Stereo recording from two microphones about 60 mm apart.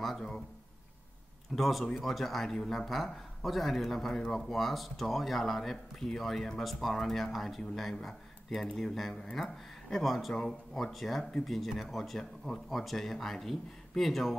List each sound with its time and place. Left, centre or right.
1.5 s speech: centre